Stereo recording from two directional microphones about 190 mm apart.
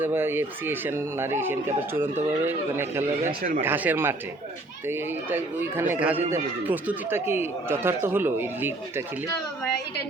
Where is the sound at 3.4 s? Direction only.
45° right (ahead or behind).